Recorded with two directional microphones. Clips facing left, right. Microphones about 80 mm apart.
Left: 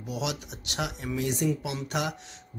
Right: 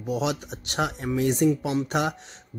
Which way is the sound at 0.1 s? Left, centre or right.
Right.